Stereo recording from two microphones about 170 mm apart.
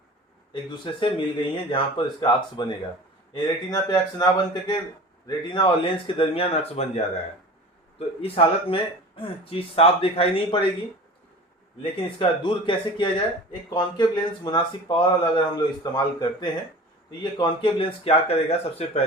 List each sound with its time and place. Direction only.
0.5 s speech: 30° left (ahead or behind)
5.5 s speech: 25° left (ahead or behind)
11.8 s speech: 30° left (ahead or behind)